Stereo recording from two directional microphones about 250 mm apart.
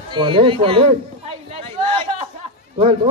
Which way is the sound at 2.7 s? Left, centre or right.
Right.